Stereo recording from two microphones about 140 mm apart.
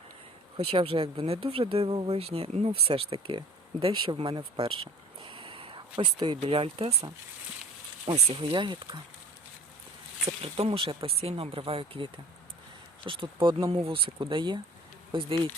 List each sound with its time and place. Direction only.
0.5 s speech: 40° right (ahead or behind)
5.2 s a sound: 40° right (ahead or behind)
8.3 s speech: 40° right (ahead or behind)
10.4 s speech: 45° right (ahead or behind)